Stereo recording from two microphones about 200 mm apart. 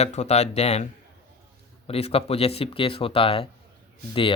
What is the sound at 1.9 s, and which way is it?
Speech, 30° left (ahead or behind).